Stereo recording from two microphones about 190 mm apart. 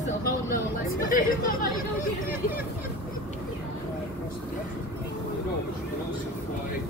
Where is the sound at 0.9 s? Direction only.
45° left (ahead or behind).